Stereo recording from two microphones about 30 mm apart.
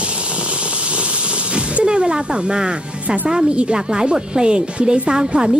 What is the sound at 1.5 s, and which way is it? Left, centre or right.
Speech, right.